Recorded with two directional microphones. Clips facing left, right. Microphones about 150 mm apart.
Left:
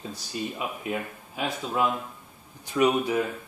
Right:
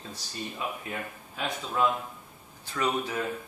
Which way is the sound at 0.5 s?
15° left (ahead or behind).